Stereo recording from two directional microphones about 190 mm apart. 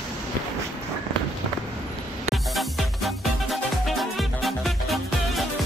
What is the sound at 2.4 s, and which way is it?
Music, centre (ahead or behind).